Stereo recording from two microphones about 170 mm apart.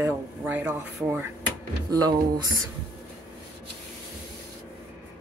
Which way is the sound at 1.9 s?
25° right (ahead or behind).